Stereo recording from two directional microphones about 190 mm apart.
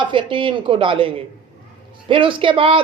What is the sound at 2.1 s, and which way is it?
Speech, 25° right (ahead or behind).